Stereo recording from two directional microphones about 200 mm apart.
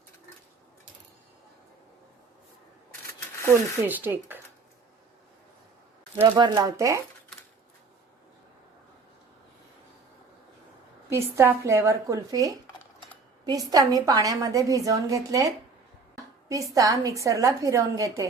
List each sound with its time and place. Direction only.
3.8 s a woman's voice: 10° right (ahead or behind)
6.2 s a woman's voice: 25° right (ahead or behind)
11.1 s a woman's voice: 15° right (ahead or behind)